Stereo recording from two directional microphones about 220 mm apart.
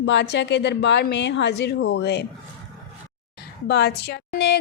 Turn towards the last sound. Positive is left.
turn(degrees=50)  # may be behind; listen again after turning